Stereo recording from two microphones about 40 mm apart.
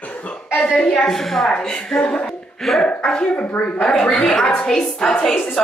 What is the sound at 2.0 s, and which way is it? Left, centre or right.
Speech, left.